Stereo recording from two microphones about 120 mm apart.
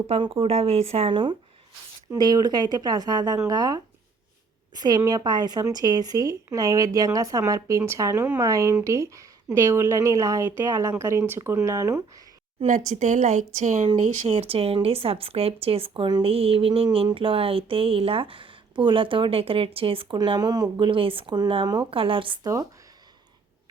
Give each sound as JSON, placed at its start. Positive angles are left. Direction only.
{"t": 0.1, "sound": "speech", "side_deg": -50}
{"t": 2.1, "sound": "speech", "side_deg": -35}
{"t": 12.6, "sound": "speech", "side_deg": -80}
{"t": 14.3, "sound": "speech", "side_deg": -55}
{"t": 20.1, "sound": "speech", "side_deg": -35}